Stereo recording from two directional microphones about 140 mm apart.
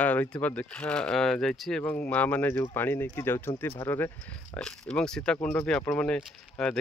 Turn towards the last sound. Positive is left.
turn(degrees=5)  # may be behind; listen again after turning